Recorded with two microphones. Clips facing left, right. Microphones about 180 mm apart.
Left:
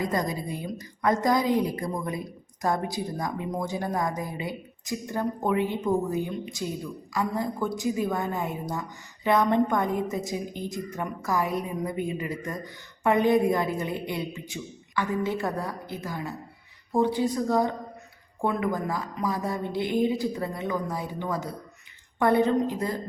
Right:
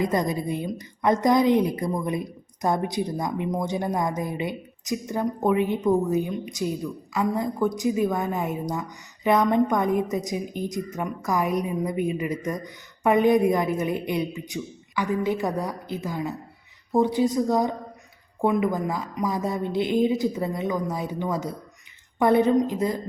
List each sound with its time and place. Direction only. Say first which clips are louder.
0.0 s a woman's voice: right 4 dB; 20° right (ahead or behind)